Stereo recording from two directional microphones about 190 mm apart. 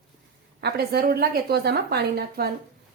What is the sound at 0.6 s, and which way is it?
A woman's voice, 55° right (ahead or behind).